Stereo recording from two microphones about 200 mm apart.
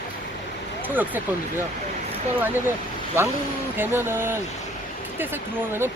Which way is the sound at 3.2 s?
10° right (ahead or behind).